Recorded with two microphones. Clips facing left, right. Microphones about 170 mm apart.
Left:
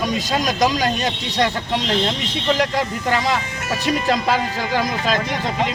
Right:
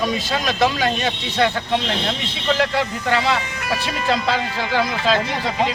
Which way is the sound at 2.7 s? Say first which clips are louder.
Even; 40° left (ahead or behind).